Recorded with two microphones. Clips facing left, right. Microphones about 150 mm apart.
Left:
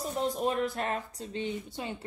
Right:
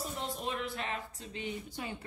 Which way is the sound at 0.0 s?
40° left (ahead or behind).